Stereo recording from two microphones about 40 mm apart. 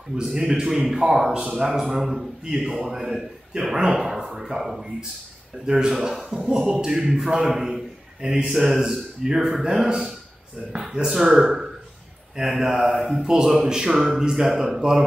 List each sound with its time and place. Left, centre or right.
0.1 s a man's voice: centre
5.7 s a man's voice: centre
8.5 s a man's voice: centre
11.3 s a man's voice: centre